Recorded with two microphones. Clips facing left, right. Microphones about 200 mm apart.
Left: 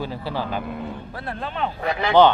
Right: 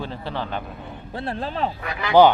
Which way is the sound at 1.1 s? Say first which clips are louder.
Right 6 dB; 30° right (ahead or behind).